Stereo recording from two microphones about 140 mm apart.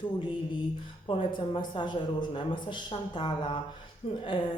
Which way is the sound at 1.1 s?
35° left (ahead or behind).